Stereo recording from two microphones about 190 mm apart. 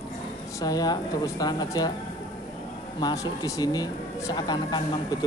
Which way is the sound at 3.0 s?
20° left (ahead or behind).